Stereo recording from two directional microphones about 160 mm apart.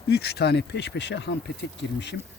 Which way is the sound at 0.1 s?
90° left.